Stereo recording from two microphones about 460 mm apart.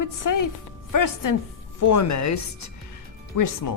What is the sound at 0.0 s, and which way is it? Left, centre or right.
Speech, left.